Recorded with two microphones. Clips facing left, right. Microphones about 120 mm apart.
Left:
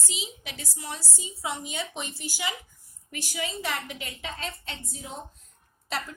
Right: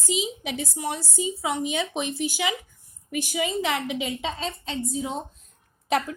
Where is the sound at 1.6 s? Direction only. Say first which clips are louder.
Right 8 dB; 80° right.